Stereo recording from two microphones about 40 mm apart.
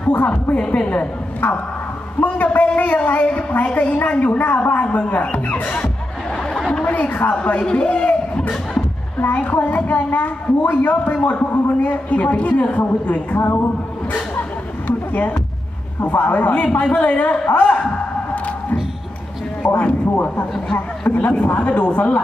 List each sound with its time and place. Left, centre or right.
0.1 s a woman's voice: left
2.2 s a woman's voice: left
6.8 s a woman's voice: left
7.5 s a man's voice: left
9.2 s a woman's voice: left
14.9 s a sound: left
16.1 s a woman's voice: left
19.7 s a woman's voice: left